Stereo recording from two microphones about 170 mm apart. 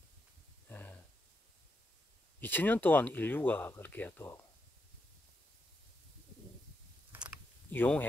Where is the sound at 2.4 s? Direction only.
10° left (ahead or behind).